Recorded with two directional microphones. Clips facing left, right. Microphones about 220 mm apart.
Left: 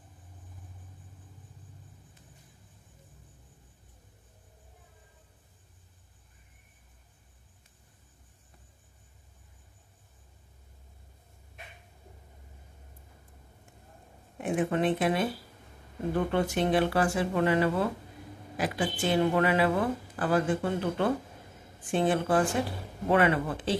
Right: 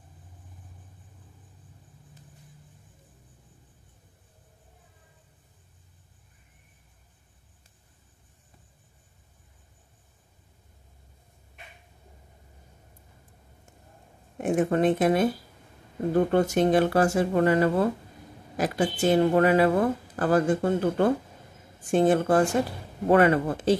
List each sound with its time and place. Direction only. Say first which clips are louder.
14.4 s speech: right 5 dB; 45° right (ahead or behind)